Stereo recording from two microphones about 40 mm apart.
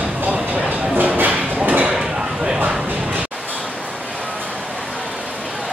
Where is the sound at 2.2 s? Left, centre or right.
Centre.